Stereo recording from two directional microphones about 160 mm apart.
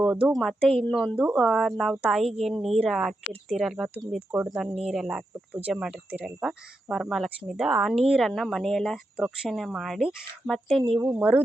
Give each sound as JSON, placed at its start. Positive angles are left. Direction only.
{"t": 0.0, "sound": "speech", "side_deg": -5}
{"t": 11.0, "sound": "a woman's voice", "side_deg": -10}